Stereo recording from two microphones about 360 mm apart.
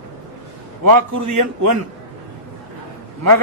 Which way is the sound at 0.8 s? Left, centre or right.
Right.